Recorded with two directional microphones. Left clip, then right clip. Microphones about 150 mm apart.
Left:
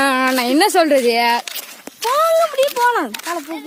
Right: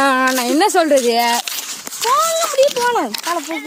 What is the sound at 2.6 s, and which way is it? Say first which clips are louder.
Speech: right 1 dB; centre (ahead or behind).